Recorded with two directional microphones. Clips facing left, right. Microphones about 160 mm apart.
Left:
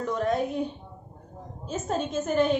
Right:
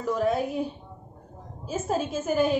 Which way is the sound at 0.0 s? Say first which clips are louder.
Right 1 dB; 5° right (ahead or behind).